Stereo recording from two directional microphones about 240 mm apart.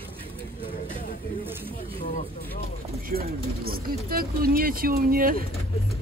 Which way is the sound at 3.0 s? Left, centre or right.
Right.